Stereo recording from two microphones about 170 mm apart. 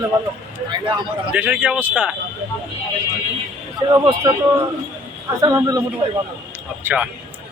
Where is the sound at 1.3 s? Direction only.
10° right (ahead or behind).